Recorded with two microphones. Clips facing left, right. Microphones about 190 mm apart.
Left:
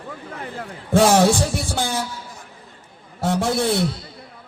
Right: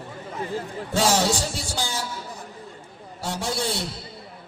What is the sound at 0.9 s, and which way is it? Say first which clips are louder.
Music: left 7 dB; 55° left (ahead or behind).